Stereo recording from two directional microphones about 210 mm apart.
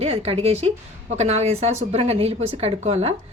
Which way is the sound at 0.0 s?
30° right (ahead or behind).